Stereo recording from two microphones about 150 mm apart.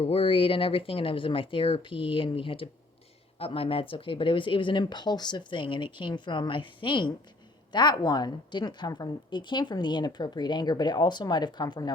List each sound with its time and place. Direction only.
0.0 s a woman's voice: 35° left (ahead or behind)